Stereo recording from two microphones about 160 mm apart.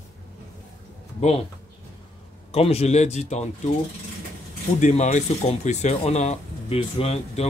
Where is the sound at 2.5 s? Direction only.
40° left (ahead or behind).